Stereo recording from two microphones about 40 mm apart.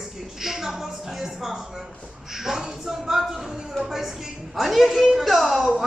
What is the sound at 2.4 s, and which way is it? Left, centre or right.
Speech, centre.